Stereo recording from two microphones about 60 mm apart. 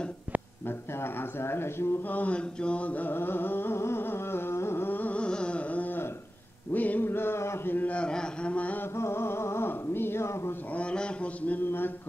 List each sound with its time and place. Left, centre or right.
0.7 s speech: left
2.1 s carnatic music: left
5.2 s carnatic music: centre
6.7 s chant: left
7.7 s a sound: left
8.9 s a sound: left
10.7 s mantra: centre